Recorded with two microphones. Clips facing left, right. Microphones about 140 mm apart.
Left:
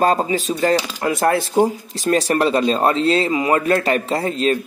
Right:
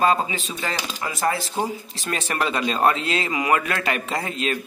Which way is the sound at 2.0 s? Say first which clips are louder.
Left 9 dB; 35° left (ahead or behind).